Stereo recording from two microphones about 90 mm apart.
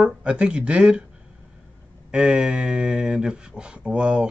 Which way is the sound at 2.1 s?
5° right (ahead or behind).